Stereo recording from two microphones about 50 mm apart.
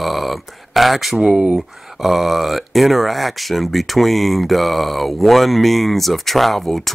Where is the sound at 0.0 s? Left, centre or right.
Centre.